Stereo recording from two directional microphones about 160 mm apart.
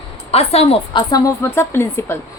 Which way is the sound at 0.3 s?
40° left (ahead or behind).